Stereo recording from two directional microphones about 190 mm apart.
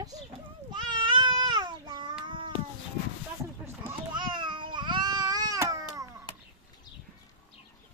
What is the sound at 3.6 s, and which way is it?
Children playing, 10° right (ahead or behind).